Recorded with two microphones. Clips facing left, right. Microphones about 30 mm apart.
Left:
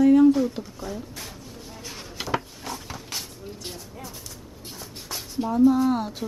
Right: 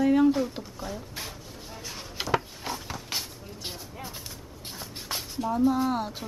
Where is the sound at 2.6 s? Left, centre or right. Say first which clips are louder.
Even; centre.